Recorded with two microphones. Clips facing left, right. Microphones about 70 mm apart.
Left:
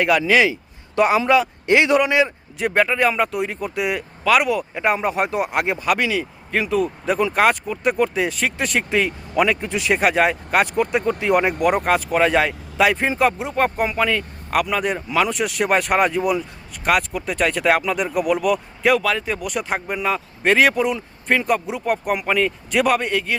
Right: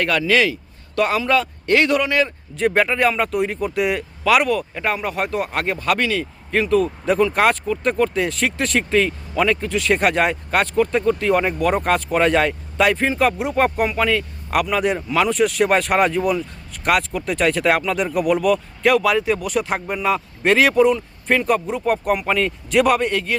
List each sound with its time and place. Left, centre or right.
0.0 s speech: centre
2.6 s speech: centre
9.9 s speech: centre